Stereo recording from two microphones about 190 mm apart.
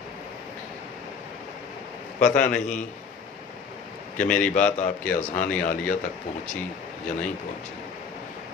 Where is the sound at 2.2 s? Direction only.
40° left (ahead or behind).